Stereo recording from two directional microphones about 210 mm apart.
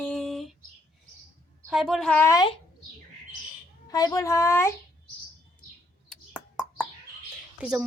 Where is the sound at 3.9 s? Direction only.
15° left (ahead or behind).